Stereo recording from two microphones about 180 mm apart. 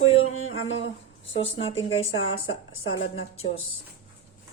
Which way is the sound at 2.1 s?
90° left.